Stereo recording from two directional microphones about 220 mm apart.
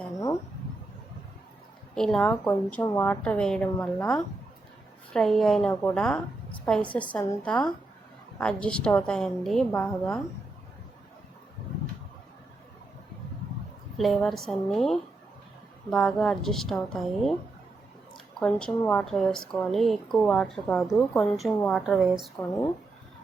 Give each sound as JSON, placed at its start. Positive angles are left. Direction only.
{"t": 2.0, "sound": "a woman's voice", "side_deg": 0}
{"t": 5.1, "sound": "a woman's voice", "side_deg": 0}
{"t": 14.0, "sound": "a woman's voice", "side_deg": 0}
{"t": 18.3, "sound": "a woman's voice", "side_deg": 5}